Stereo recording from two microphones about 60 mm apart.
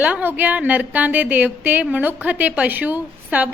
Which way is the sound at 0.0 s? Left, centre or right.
Right.